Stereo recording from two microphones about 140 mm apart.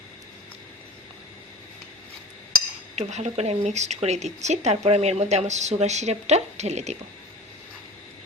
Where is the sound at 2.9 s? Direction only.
55° right (ahead or behind).